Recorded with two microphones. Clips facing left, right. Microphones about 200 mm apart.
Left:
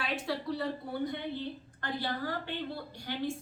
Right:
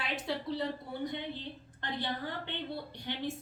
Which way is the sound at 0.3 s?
20° right (ahead or behind).